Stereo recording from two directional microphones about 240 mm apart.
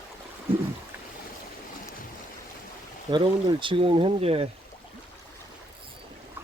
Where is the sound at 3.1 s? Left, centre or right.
Centre.